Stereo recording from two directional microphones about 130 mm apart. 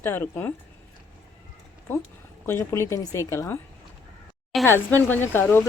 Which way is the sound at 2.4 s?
20° left (ahead or behind).